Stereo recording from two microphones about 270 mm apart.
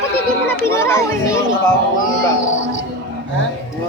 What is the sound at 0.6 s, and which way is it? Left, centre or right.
Speech, centre.